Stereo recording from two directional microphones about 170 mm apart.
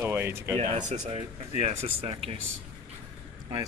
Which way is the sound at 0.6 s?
45° right (ahead or behind).